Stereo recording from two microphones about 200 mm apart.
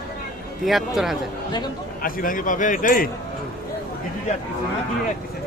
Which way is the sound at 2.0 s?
45° left (ahead or behind).